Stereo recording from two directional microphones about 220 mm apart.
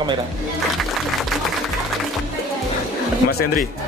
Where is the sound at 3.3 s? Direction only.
40° left (ahead or behind).